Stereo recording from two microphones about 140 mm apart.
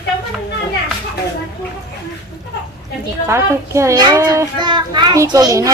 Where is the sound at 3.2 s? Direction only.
20° right (ahead or behind).